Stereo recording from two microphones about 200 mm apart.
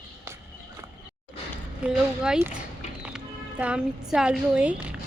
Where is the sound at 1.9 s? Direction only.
5° right (ahead or behind).